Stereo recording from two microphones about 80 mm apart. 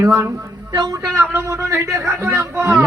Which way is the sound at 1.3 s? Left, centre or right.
Right.